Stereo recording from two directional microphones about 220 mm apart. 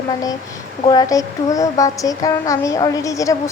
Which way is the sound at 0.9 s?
15° left (ahead or behind).